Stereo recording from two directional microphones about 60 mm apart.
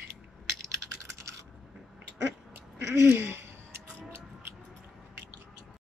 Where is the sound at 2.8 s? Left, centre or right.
Right.